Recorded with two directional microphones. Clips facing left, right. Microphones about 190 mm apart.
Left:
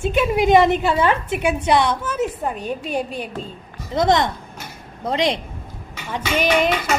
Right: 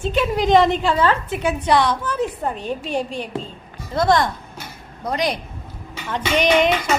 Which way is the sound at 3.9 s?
20° left (ahead or behind).